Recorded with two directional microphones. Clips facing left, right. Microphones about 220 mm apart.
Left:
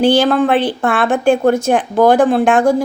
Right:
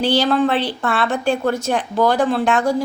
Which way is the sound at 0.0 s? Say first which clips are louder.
Left 5 dB; 50° left (ahead or behind).